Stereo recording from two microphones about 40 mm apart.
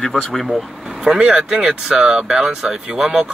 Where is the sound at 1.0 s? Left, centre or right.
Centre.